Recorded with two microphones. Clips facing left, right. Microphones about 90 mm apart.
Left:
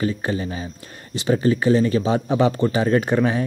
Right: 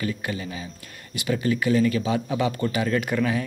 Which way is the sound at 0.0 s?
30° left (ahead or behind).